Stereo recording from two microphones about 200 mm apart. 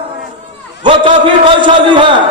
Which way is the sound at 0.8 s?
25° right (ahead or behind).